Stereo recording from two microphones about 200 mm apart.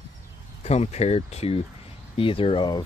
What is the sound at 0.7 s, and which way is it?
Speech, 30° left (ahead or behind).